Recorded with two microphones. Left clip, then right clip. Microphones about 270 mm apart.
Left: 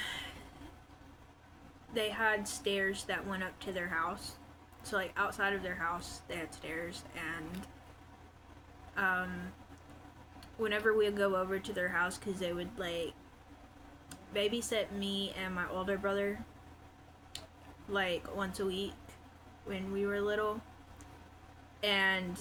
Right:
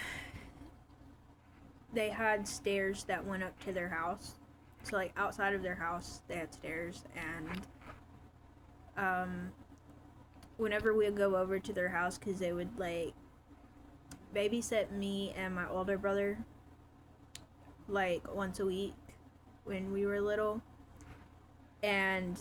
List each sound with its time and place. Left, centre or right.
0.0 s a sound: centre
1.9 s speech: centre
9.0 s speech: centre
10.6 s speech: centre
14.1 s a sound: centre
14.7 s speech: centre
17.3 s a sound: centre
17.9 s speech: centre
21.8 s speech: centre